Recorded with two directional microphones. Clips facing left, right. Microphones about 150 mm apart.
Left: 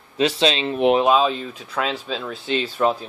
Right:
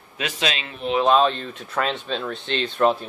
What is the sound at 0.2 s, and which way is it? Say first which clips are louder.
Speech: left 8 dB; 30° left (ahead or behind).